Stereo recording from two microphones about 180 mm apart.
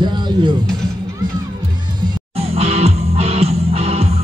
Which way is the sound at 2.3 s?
35° right (ahead or behind).